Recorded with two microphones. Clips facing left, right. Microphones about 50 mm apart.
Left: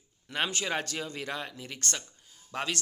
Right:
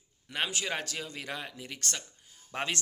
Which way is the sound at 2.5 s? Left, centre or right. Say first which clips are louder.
Even; right.